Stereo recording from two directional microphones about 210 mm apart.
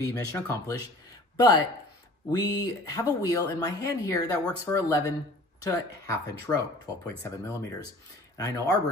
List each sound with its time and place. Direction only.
0.0 s speech: 15° left (ahead or behind)